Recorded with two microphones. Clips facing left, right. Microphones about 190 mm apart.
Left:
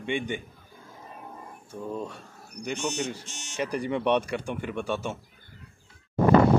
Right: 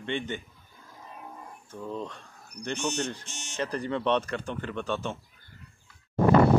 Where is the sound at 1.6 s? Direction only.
10° left (ahead or behind).